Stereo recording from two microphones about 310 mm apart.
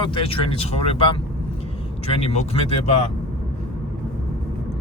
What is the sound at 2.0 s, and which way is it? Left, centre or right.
Speech, centre.